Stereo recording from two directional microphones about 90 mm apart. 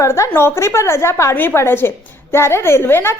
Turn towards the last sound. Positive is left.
turn(degrees=25)  # may be behind; listen again after turning